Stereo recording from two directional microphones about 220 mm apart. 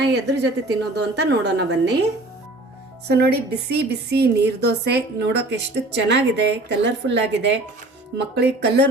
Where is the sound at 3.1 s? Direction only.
50° right (ahead or behind).